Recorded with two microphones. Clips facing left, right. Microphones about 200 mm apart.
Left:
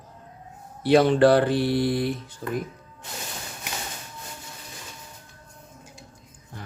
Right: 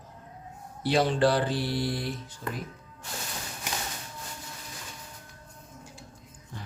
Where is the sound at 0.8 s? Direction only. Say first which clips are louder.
Left 7 dB; 60° left (ahead or behind).